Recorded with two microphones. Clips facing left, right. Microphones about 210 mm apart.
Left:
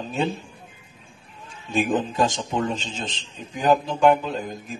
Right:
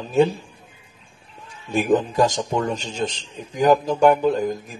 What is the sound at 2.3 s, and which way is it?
Speech, 40° right (ahead or behind).